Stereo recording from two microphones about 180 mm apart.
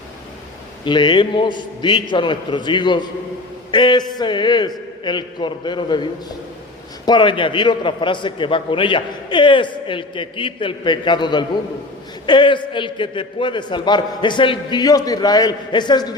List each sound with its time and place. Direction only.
0.9 s a man's voice: 25° left (ahead or behind)